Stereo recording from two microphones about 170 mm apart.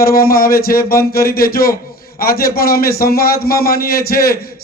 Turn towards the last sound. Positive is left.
turn(degrees=60)  # may be behind; listen again after turning